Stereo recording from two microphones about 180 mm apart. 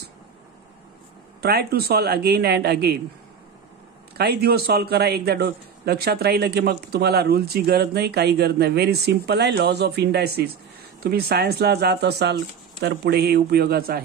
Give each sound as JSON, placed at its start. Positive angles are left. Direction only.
{"t": 1.4, "sound": "a man's voice", "side_deg": -65}
{"t": 4.2, "sound": "a man's voice", "side_deg": -60}